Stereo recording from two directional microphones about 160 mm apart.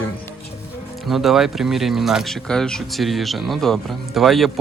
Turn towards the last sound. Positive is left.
turn(degrees=0)  # may be behind; listen again after turning